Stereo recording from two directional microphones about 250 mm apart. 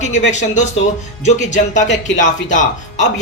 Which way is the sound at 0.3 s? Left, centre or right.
Left.